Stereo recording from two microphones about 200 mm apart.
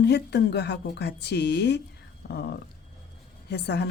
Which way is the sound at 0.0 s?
55° left (ahead or behind).